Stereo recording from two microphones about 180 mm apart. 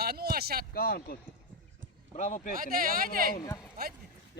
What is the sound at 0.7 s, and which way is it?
Speech, 55° left (ahead or behind).